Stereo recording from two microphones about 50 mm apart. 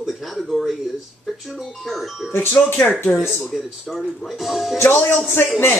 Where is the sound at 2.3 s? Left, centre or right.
Left.